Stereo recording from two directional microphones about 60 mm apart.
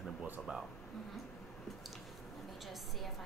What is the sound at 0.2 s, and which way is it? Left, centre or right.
Speech, centre.